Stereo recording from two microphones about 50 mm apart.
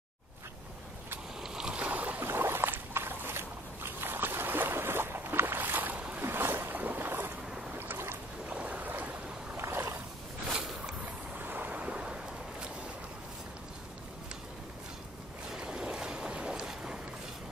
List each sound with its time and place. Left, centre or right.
1.4 s boat: centre
1.8 s boat: right
2.2 s boat: right
5.6 s boat: right
6.2 s boat: right
8.5 s boat: right
9.6 s boat: right
11.3 s vehicle: right
11.8 s a sound: centre
15.5 s boat: centre